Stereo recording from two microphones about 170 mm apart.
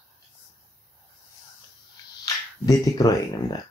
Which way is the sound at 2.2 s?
20° left (ahead or behind).